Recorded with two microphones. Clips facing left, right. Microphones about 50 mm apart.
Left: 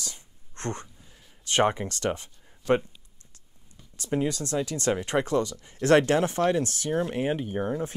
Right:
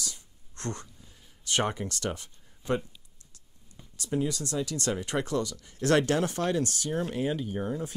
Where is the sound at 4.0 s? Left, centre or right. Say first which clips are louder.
Left 3 dB; left.